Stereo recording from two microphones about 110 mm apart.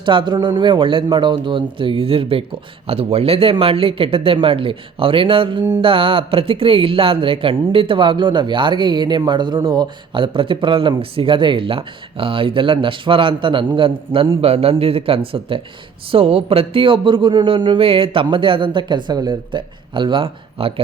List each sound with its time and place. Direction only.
0.0 s speech: 45° right (ahead or behind)
14.4 s speech: 65° right (ahead or behind)